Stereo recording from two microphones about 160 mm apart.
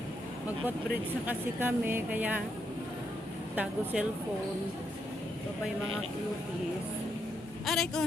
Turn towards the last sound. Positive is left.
turn(degrees=0)  # may be behind; listen again after turning